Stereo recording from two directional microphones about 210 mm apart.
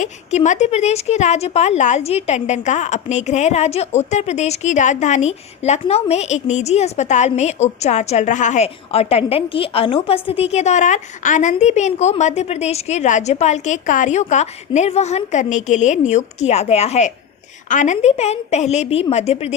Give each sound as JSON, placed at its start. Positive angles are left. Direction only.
{"t": 0.0, "sound": "a woman's voice", "side_deg": 35}